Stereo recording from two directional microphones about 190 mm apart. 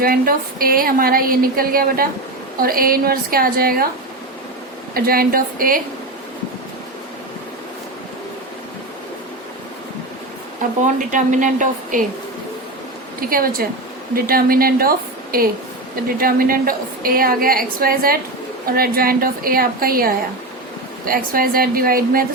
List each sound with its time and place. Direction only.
0.0 s a woman's voice: 50° right (ahead or behind)
4.9 s a woman's voice: 50° right (ahead or behind)
11.1 s a woman's voice: 40° right (ahead or behind)
13.1 s a woman's voice: 50° right (ahead or behind)